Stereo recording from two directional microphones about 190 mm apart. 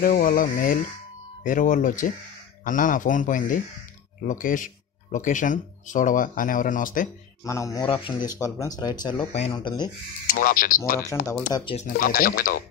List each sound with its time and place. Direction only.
0.0 s speech: 50° left (ahead or behind)
7.4 s speech: 15° left (ahead or behind)
10.2 s speech: 50° left (ahead or behind)